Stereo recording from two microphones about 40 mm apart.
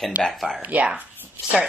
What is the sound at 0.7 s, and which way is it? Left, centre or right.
Speech, right.